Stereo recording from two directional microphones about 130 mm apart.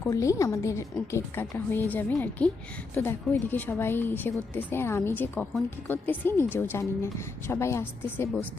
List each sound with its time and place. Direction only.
0.0 s a woman's voice: 25° left (ahead or behind)